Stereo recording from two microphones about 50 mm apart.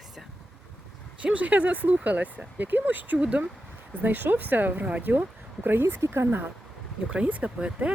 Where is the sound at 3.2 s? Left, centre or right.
Right.